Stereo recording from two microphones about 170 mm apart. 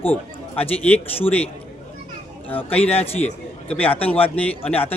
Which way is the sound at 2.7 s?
10° left (ahead or behind).